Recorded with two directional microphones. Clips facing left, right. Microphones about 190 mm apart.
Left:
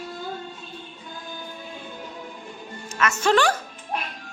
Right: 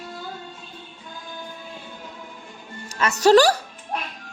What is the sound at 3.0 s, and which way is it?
Speech, 35° right (ahead or behind).